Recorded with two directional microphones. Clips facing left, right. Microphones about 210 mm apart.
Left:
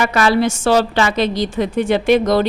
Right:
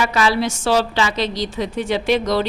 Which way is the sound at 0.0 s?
55° left (ahead or behind).